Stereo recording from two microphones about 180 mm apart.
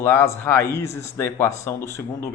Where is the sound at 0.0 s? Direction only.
15° left (ahead or behind).